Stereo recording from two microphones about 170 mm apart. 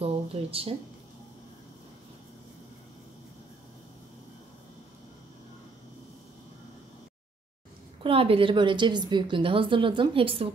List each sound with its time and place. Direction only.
0.0 s speech: 35° right (ahead or behind)
8.0 s a woman's voice: 35° right (ahead or behind)